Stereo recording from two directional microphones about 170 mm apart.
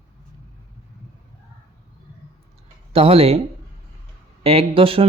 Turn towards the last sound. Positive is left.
turn(degrees=-30)  # may be behind; listen again after turning